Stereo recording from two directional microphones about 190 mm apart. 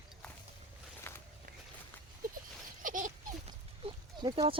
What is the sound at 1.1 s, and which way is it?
Walk, 10° left (ahead or behind).